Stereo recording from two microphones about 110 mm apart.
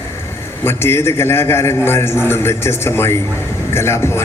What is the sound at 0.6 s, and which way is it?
Speech, 20° left (ahead or behind).